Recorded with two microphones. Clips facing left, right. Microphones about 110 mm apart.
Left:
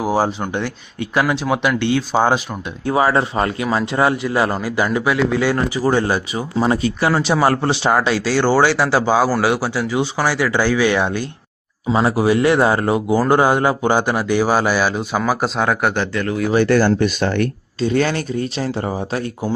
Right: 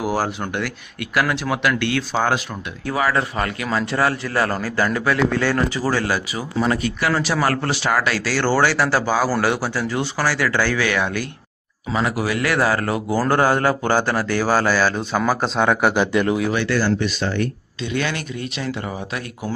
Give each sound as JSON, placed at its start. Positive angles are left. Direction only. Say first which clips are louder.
{"t": 0.0, "sound": "a man's voice", "louder": "left 4 dB", "side_deg": 15}
{"t": 2.8, "sound": "a man's voice", "louder": "left 5 dB", "side_deg": 25}
{"t": 16.1, "sound": "speech", "louder": "right 3 dB", "side_deg": -15}
{"t": 16.6, "sound": "speech", "louder": "left 5 dB", "side_deg": 50}
{"t": 17.7, "sound": "speech", "louder": "left 7 dB", "side_deg": 35}